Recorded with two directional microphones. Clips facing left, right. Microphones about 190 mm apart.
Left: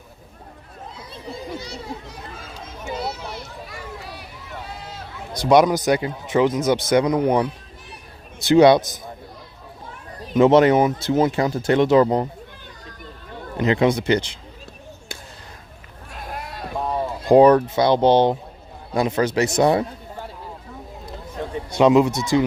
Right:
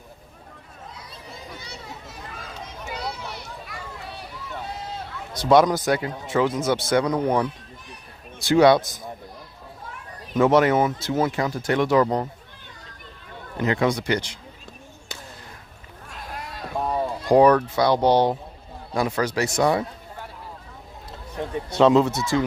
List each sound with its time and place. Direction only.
2.8 s children playing: 25° left (ahead or behind)
5.3 s speech: 15° left (ahead or behind)
10.3 s speech: 20° left (ahead or behind)
13.6 s speech: 20° left (ahead or behind)
16.7 s run: centre (ahead or behind)
17.2 s speech: 25° left (ahead or behind)
21.7 s speech: 15° left (ahead or behind)